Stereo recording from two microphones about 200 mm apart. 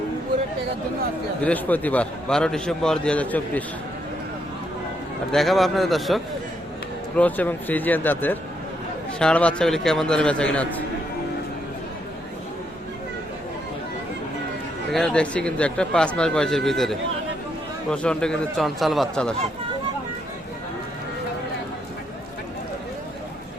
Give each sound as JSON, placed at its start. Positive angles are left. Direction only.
{"t": 1.4, "sound": "a man's voice", "side_deg": 5}
{"t": 5.3, "sound": "a man's voice", "side_deg": 0}
{"t": 14.9, "sound": "speech", "side_deg": 5}